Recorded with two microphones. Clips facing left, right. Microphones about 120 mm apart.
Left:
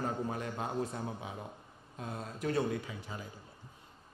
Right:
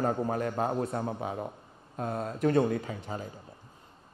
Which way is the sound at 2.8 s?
45° right (ahead or behind).